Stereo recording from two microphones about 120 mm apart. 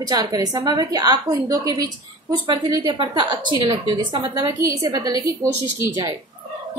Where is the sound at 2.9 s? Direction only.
45° right (ahead or behind).